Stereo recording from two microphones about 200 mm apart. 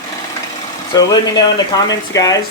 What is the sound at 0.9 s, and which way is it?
Speech, 20° left (ahead or behind).